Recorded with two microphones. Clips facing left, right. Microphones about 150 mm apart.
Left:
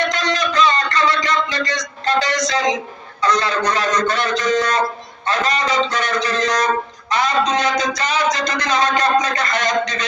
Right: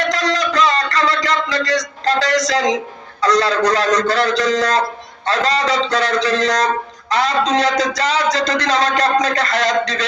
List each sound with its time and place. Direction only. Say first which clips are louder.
0.1 s music: right 2 dB; 90° right
3.2 s speech: right 4 dB; 90° right